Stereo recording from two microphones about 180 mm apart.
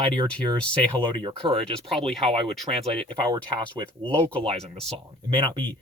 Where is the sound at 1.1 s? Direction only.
25° right (ahead or behind).